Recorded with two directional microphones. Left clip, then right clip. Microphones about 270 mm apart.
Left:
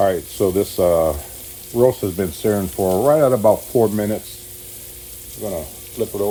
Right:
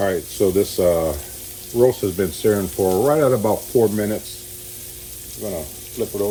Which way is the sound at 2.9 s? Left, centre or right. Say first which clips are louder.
Left 2 dB; centre.